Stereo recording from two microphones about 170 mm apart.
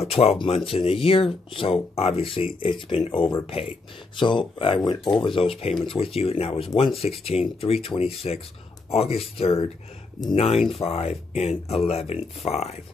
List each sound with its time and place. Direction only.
0.0 s speech: 35° left (ahead or behind)